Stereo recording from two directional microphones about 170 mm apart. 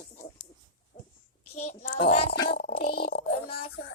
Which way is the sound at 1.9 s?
35° left (ahead or behind).